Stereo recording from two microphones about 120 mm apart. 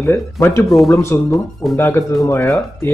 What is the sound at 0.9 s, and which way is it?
Speech, 25° left (ahead or behind).